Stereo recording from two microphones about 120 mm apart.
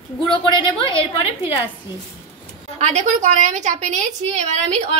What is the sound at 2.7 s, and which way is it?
A woman's voice, 65° right (ahead or behind).